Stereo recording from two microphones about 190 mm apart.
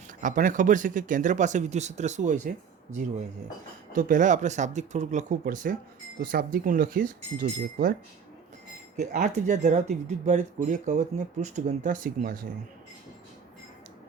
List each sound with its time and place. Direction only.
0.2 s speech: 45° right (ahead or behind)
3.9 s speech: 45° right (ahead or behind)
9.0 s speech: 40° right (ahead or behind)